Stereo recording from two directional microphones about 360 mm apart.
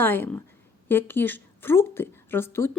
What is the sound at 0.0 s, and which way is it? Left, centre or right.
A woman's voice, centre.